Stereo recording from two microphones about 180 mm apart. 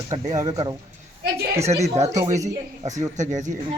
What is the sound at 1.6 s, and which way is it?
Speech, 35° right (ahead or behind).